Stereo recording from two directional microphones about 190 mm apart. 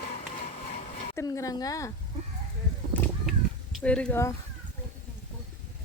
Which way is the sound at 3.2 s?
Centre (ahead or behind).